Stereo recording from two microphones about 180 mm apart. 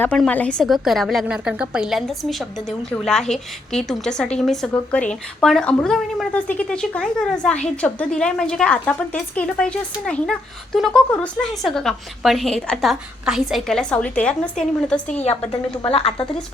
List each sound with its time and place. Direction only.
0.0 s a woman's voice: 5° left (ahead or behind)
15.8 s a woman's voice: 35° left (ahead or behind)